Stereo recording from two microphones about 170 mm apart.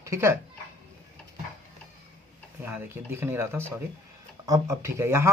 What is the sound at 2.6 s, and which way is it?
Speech, 10° right (ahead or behind).